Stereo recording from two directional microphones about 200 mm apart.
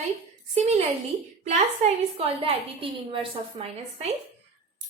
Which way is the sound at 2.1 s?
30° right (ahead or behind).